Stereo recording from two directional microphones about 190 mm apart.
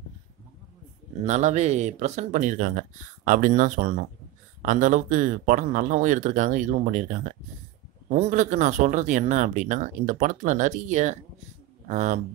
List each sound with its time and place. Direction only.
1.2 s speech: 40° right (ahead or behind)